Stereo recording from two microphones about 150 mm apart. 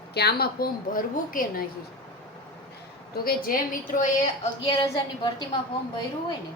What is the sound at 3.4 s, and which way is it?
Speech, 65° left (ahead or behind).